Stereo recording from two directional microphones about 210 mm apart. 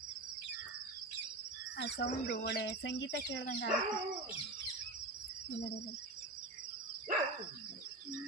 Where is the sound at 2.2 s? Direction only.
50° left (ahead or behind).